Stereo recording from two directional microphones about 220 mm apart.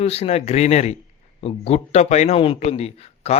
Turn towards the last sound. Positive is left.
turn(degrees=30)  # may be behind; listen again after turning